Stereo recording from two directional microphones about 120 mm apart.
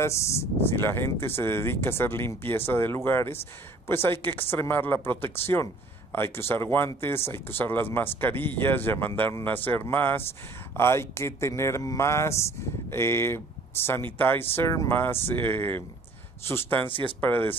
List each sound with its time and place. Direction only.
0.0 s speech: 25° left (ahead or behind)